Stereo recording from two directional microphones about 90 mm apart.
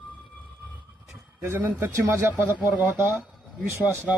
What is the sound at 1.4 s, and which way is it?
Speech, 25° right (ahead or behind).